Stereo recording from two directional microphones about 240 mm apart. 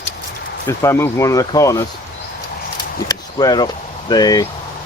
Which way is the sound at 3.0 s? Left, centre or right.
Centre.